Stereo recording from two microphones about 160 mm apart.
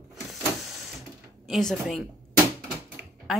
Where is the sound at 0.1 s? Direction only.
Centre (ahead or behind).